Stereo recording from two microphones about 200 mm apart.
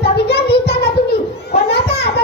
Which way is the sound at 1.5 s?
55° left (ahead or behind).